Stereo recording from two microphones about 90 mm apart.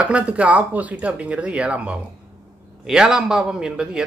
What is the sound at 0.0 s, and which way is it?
A man's voice, 15° right (ahead or behind).